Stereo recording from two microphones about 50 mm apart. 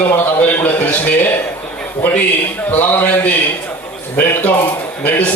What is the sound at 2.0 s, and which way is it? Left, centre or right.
A man's voice, left.